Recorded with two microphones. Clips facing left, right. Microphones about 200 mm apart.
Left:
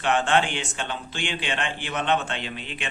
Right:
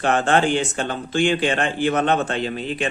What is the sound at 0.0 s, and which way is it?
Speech, 40° right (ahead or behind).